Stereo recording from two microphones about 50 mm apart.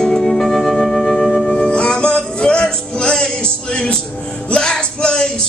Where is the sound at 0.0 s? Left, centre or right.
Centre.